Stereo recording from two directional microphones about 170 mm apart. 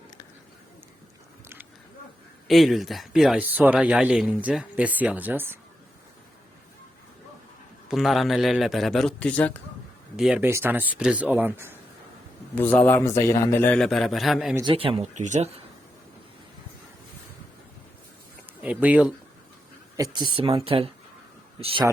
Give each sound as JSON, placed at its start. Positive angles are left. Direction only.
{"t": 2.5, "sound": "speech", "side_deg": 0}
{"t": 7.9, "sound": "a man's voice", "side_deg": 0}
{"t": 10.2, "sound": "a man's voice", "side_deg": -5}
{"t": 12.5, "sound": "a man's voice", "side_deg": 10}
{"t": 14.6, "sound": "speech", "side_deg": -30}
{"t": 18.6, "sound": "speech", "side_deg": -10}
{"t": 20.0, "sound": "speech", "side_deg": -25}